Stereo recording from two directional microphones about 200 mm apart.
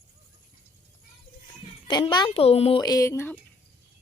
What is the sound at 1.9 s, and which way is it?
Speech, 20° left (ahead or behind).